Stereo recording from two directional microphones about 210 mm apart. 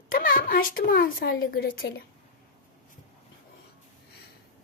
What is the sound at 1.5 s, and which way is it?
Speech, 45° left (ahead or behind).